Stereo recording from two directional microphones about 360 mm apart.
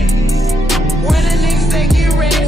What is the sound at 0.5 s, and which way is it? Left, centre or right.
Music, centre.